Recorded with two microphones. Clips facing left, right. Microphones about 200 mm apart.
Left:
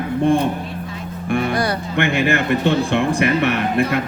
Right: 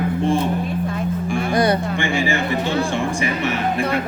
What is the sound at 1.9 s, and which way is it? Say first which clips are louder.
Speech: left 3 dB; 65° left (ahead or behind).